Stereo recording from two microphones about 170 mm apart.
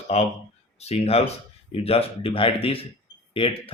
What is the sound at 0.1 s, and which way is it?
Speech, 40° left (ahead or behind).